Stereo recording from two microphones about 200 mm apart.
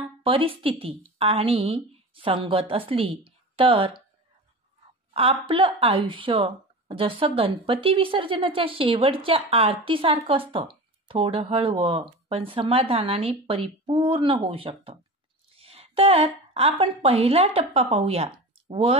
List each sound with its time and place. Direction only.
0.2 s a woman's voice: 25° right (ahead or behind)
5.1 s a woman's voice: 30° right (ahead or behind)